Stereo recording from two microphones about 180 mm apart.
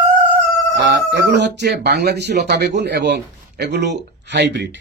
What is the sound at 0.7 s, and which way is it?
Speech, 70° right (ahead or behind).